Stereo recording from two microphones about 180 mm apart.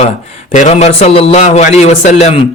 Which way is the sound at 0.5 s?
40° left (ahead or behind).